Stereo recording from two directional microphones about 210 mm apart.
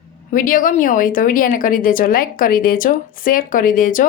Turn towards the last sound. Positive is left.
turn(degrees=40)  # may be behind; listen again after turning